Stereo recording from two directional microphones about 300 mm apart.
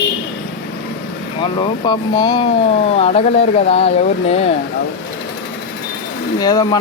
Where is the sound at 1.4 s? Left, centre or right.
Centre.